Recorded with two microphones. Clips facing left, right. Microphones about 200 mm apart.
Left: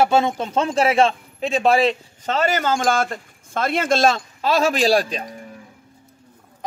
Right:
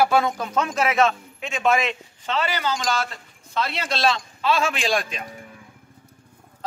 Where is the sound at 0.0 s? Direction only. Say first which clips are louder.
Left 2 dB; 25° left (ahead or behind).